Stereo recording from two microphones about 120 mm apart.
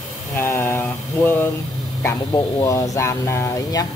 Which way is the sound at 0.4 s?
20° left (ahead or behind).